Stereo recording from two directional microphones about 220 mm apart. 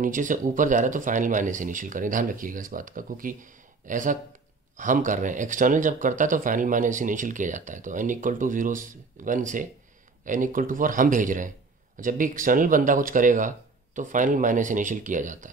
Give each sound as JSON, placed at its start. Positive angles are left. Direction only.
{"t": 0.0, "sound": "speech", "side_deg": -35}